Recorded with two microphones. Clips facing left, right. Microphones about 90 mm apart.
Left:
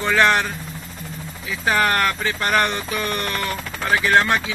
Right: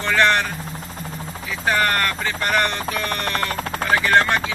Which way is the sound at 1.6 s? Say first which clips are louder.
Left 1 dB; 5° left (ahead or behind).